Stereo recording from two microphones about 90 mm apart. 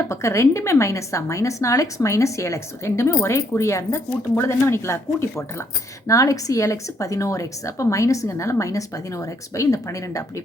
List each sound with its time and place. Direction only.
0.1 s a woman's voice: 35° left (ahead or behind)